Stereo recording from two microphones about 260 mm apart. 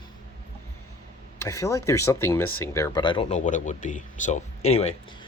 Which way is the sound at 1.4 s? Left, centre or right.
Centre.